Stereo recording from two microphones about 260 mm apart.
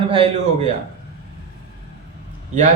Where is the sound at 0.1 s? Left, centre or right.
Right.